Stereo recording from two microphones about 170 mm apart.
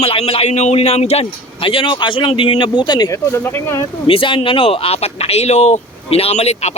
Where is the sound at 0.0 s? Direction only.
35° left (ahead or behind); by 3.8 s 15° left (ahead or behind).